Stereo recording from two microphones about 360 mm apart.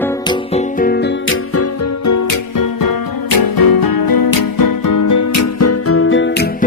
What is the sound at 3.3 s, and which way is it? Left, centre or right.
Music, left.